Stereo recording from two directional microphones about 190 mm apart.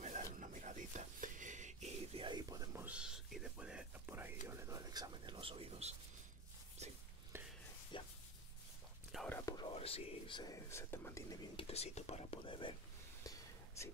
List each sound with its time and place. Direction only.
0.0 s whispering: 40° right (ahead or behind)
7.3 s a sound: 15° right (ahead or behind)
7.9 s a sound: 25° left (ahead or behind)
9.3 s whispering: 20° left (ahead or behind)
9.8 s whispering: 30° left (ahead or behind); by 11.3 s 15° left (ahead or behind)
11.5 s speech: 30° left (ahead or behind)
13.2 s whispering: 20° left (ahead or behind)